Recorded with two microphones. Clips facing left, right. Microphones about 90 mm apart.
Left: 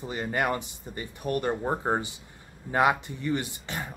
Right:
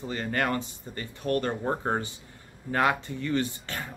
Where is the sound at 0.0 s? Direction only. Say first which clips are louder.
Even; 15° left (ahead or behind).